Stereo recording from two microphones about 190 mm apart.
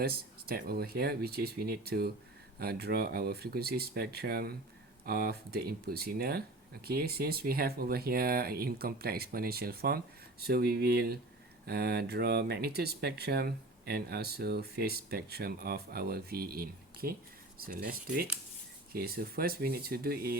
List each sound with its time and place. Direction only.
0.0 s speech: 55° right (ahead or behind)